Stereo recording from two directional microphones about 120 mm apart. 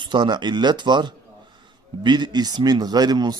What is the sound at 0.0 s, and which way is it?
A man's voice, 40° right (ahead or behind).